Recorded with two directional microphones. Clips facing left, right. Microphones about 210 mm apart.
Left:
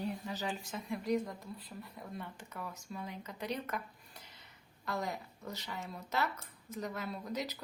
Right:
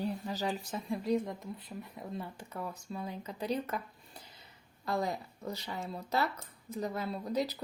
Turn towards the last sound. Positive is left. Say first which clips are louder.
# right 6 dB
turn(degrees=-35)  # may be behind; listen again after turning